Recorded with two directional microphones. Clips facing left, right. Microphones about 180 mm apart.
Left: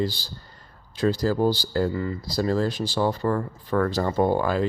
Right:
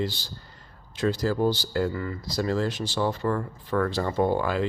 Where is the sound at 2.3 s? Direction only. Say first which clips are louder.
Left 2 dB; 35° left (ahead or behind).